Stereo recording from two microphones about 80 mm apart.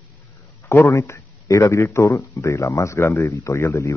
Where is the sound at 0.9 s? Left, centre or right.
Left.